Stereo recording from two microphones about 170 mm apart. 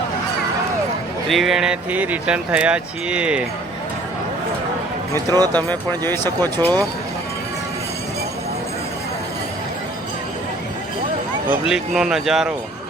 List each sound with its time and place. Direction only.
1.3 s speech: centre (ahead or behind)
5.1 s speech: 25° right (ahead or behind)
5.6 s speech: 15° left (ahead or behind)
11.7 s speech: 5° right (ahead or behind)